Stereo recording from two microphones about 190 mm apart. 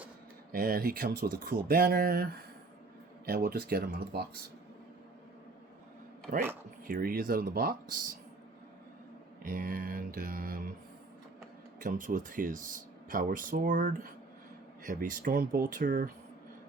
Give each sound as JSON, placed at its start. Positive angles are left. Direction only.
{"t": 0.5, "sound": "speech", "side_deg": -50}
{"t": 6.8, "sound": "speech", "side_deg": -50}
{"t": 9.4, "sound": "speech", "side_deg": -45}
{"t": 11.8, "sound": "speech", "side_deg": -45}